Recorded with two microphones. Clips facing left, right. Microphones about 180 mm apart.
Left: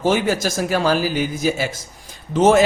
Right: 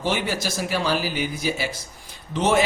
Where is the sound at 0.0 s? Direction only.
45° left (ahead or behind).